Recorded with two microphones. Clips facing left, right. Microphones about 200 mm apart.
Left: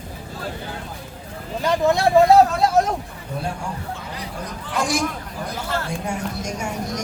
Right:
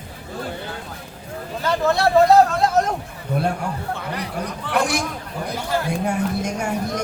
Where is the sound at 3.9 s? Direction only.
65° right (ahead or behind).